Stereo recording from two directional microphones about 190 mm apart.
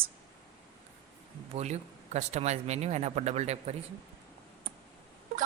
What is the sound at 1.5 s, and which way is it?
Speech, 35° right (ahead or behind).